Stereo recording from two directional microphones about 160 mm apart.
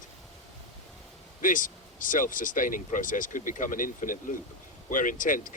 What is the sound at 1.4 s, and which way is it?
Speech, 55° left (ahead or behind).